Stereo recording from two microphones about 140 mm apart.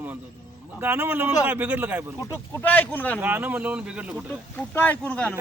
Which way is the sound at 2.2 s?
20° left (ahead or behind).